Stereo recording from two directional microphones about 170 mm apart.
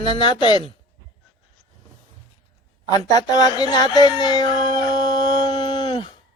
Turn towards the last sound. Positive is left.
turn(degrees=30)  # may be behind; listen again after turning